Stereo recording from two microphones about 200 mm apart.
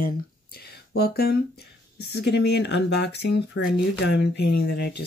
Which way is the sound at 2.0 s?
55° left (ahead or behind).